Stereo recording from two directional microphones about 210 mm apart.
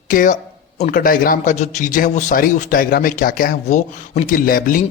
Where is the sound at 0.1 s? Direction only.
40° left (ahead or behind).